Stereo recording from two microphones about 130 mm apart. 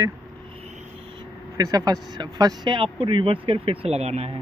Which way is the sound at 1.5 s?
30° right (ahead or behind).